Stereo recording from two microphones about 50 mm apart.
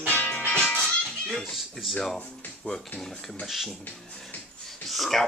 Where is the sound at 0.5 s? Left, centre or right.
Centre.